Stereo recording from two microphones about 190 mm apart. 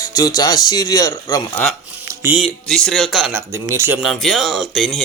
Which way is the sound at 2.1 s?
15° right (ahead or behind).